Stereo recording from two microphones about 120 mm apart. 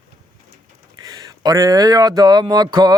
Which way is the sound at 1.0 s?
30° right (ahead or behind).